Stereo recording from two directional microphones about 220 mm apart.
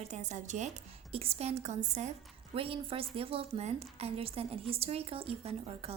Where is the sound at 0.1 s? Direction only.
30° right (ahead or behind).